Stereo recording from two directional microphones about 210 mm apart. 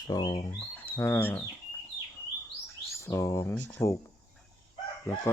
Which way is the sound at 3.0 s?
15° left (ahead or behind).